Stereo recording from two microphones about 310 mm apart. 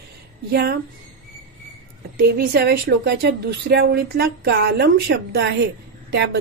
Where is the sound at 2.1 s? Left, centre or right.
Right.